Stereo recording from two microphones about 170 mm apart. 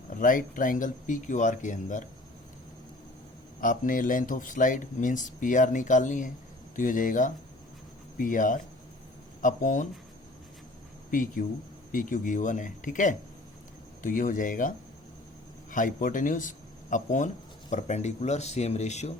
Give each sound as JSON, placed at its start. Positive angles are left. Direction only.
{"t": 0.2, "sound": "speech", "side_deg": 50}
{"t": 3.6, "sound": "speech", "side_deg": 55}
{"t": 11.1, "sound": "speech", "side_deg": 50}
{"t": 15.7, "sound": "speech", "side_deg": 50}